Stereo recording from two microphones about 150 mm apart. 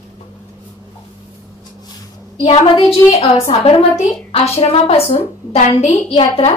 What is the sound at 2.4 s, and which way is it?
A woman's voice, 40° left (ahead or behind).